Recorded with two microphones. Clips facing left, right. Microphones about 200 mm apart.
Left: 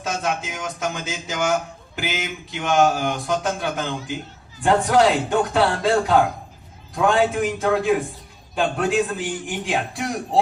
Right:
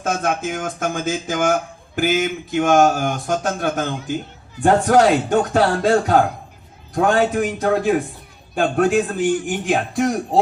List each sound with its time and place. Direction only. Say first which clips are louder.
0.0 s speech: right 4 dB; 50° right (ahead or behind)